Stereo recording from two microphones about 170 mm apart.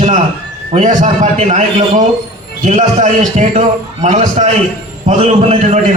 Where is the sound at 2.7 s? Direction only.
45° right (ahead or behind).